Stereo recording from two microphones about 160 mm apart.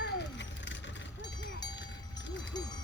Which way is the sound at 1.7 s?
90° left.